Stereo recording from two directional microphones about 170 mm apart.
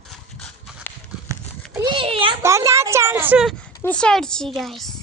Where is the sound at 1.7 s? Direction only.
25° right (ahead or behind).